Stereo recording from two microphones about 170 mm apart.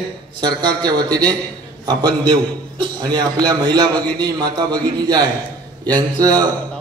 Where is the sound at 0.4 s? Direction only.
25° right (ahead or behind).